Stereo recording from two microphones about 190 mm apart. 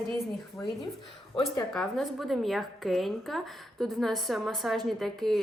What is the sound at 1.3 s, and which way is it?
Speech, 30° left (ahead or behind).